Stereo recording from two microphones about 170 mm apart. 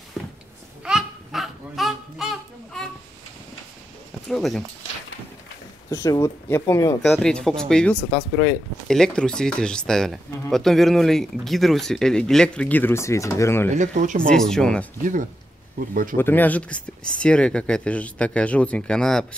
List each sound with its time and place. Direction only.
0.2 s a sound: centre (ahead or behind)
4.3 s speech: centre (ahead or behind)
5.9 s speech: 20° left (ahead or behind)
7.0 s speech: centre (ahead or behind)
13.7 s speech: 50° right (ahead or behind)
14.3 s speech: 5° left (ahead or behind)
15.9 s speech: 55° right (ahead or behind)
16.2 s speech: 10° left (ahead or behind)